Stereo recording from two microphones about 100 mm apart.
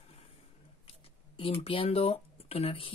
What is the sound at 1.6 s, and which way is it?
Speech, 75° left (ahead or behind).